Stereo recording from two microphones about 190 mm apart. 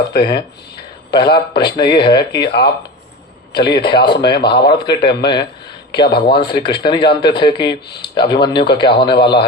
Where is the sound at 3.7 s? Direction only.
25° left (ahead or behind).